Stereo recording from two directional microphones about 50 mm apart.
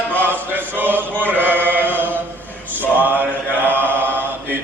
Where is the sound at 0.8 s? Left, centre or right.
Right.